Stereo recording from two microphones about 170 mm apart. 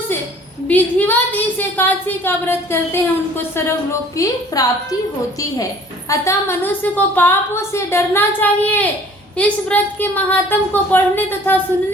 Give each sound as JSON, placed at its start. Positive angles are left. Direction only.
{"t": 0.7, "sound": "a woman's voice", "side_deg": 10}
{"t": 6.1, "sound": "a woman's voice", "side_deg": 15}